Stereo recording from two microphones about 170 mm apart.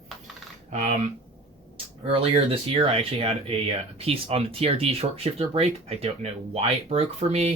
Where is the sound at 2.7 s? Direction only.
30° right (ahead or behind).